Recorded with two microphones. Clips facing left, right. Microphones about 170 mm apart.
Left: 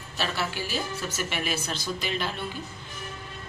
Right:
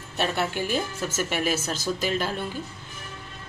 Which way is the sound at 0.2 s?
55° right (ahead or behind).